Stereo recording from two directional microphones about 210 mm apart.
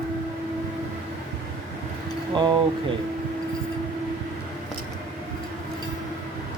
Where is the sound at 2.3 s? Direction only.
20° right (ahead or behind).